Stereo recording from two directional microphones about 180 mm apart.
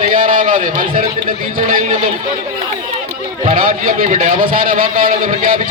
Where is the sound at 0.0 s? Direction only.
50° right (ahead or behind).